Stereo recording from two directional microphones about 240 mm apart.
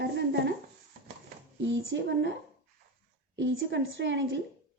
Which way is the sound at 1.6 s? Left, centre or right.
Right.